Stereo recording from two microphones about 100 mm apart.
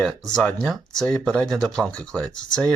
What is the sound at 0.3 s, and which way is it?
Speech, 5° left (ahead or behind).